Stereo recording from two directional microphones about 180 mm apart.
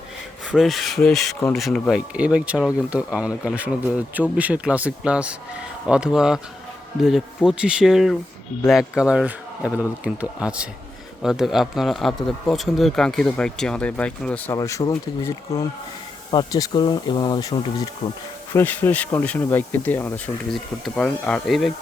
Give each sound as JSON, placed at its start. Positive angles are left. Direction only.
{"t": 0.5, "sound": "speech", "side_deg": 0}
{"t": 14.5, "sound": "speech", "side_deg": 20}
{"t": 18.5, "sound": "speech", "side_deg": 10}